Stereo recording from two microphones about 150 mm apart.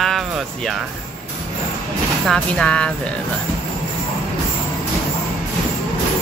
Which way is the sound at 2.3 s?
5° left (ahead or behind).